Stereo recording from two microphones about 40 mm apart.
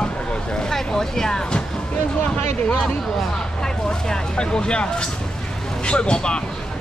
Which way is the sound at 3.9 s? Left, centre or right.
Left.